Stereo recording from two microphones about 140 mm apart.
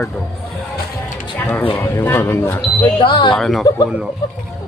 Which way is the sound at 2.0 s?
15° left (ahead or behind).